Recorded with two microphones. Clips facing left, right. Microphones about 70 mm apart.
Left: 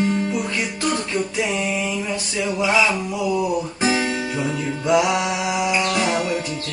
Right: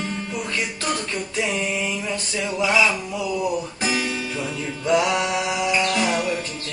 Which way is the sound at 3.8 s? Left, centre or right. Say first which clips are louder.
Left 4 dB; left.